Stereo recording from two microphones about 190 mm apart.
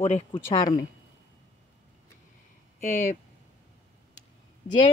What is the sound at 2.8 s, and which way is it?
Speech, 40° left (ahead or behind).